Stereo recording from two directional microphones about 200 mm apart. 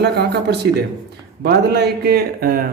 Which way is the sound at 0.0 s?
55° right (ahead or behind).